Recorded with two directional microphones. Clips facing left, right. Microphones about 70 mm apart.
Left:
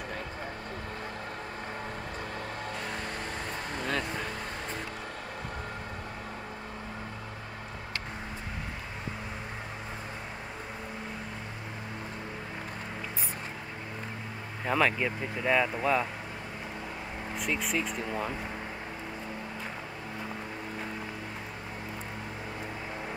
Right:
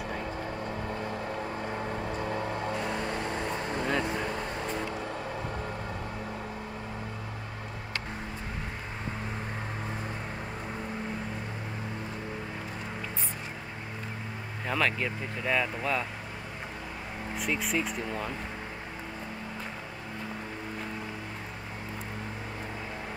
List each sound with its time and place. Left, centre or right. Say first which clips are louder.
2.8 s vehicle: right 4 dB; right
14.7 s speech: left 2 dB; centre
17.4 s speech: right 1 dB; centre